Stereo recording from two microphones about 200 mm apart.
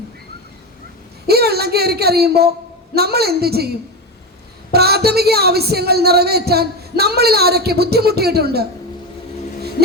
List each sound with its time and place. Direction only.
1.3 s speech: 55° right (ahead or behind)
4.7 s speech: 50° right (ahead or behind)